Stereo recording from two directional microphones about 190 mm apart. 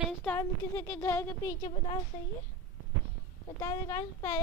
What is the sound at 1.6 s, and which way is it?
Speech, 30° left (ahead or behind).